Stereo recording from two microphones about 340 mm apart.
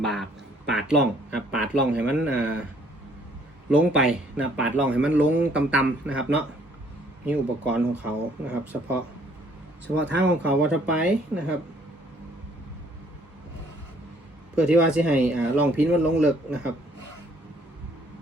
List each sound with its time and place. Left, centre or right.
0.0 s a sound: centre
0.7 s speech: centre
3.7 s speech: centre
10.1 s speech: right
10.4 s speech: centre
14.5 s speech: centre